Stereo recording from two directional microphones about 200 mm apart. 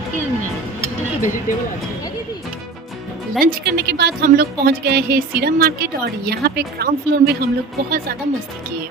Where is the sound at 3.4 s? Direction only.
50° right (ahead or behind).